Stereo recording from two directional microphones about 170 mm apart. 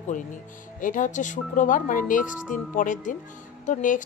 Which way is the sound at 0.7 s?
50° left (ahead or behind).